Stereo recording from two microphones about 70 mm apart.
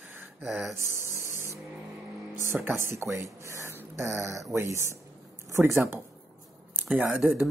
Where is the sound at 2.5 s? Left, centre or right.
Right.